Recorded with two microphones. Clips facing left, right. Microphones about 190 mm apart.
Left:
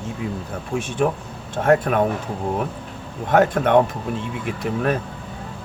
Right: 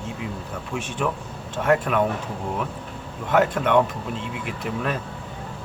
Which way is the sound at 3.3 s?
45° left (ahead or behind).